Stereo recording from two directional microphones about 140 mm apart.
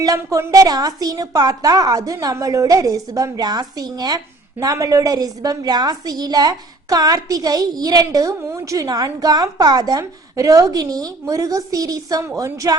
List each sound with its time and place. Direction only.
0.0 s a woman's voice: 25° right (ahead or behind)